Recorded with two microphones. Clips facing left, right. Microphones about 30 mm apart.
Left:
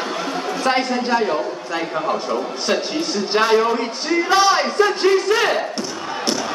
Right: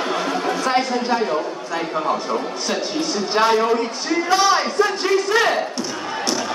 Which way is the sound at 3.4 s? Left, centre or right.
Centre.